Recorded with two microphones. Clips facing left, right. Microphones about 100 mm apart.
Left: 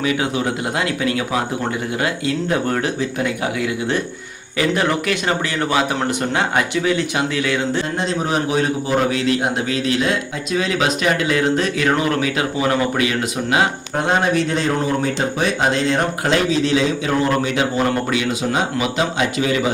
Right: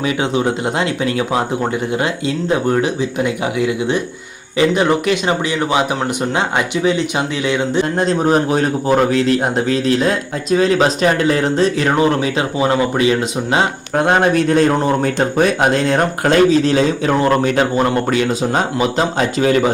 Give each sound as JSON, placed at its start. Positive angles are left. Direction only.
{"t": 0.0, "sound": "speech", "side_deg": -30}
{"t": 6.8, "sound": "speech", "side_deg": -20}
{"t": 7.9, "sound": "a man's voice", "side_deg": -45}
{"t": 13.9, "sound": "a man's voice", "side_deg": -55}